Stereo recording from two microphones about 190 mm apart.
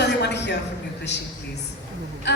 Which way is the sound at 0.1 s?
65° left (ahead or behind).